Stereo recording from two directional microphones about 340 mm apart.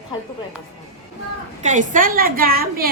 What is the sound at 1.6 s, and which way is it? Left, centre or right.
A woman's voice, right.